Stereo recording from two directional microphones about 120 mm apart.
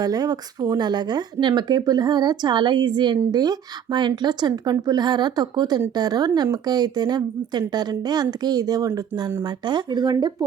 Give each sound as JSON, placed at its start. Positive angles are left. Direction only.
{"t": 0.0, "sound": "speech", "side_deg": -30}